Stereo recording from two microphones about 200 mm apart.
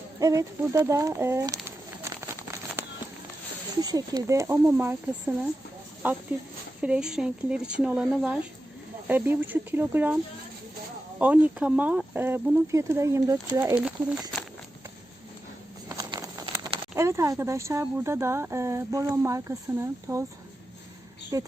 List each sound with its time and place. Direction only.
0.2 s a sound: 15° right (ahead or behind)
3.8 s speech: 20° right (ahead or behind)
6.0 s speech: 10° right (ahead or behind)
11.2 s speech: 10° right (ahead or behind)
13.7 s speech: 5° right (ahead or behind)
15.9 s a sound: 20° right (ahead or behind)
16.9 s speech: 15° right (ahead or behind)
21.3 s speech: 15° right (ahead or behind)